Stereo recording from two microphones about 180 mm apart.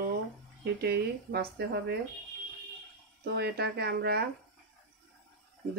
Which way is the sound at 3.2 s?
65° right (ahead or behind).